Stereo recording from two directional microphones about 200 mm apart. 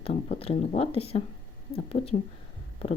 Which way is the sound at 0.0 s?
30° left (ahead or behind).